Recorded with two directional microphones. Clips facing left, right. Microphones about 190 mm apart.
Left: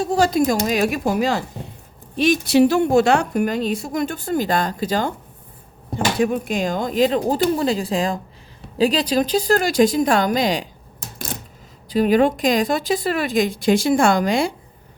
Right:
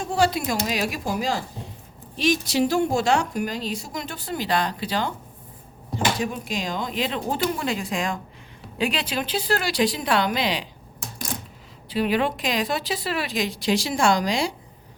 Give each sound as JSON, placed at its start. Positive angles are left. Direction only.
{"t": 0.0, "sound": "a woman's voice", "side_deg": 40}
{"t": 6.1, "sound": "a woman's voice", "side_deg": 55}
{"t": 11.9, "sound": "a woman's voice", "side_deg": 45}